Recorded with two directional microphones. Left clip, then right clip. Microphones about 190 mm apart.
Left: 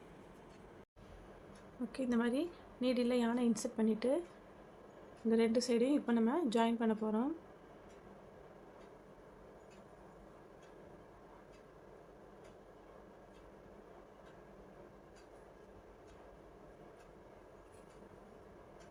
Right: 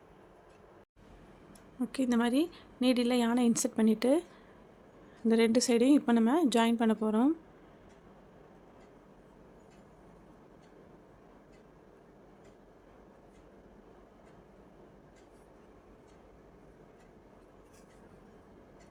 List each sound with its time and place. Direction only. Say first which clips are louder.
1.9 s a woman's voice: right 6 dB; 65° right (ahead or behind)
5.3 s a woman's voice: right 6 dB; 65° right (ahead or behind)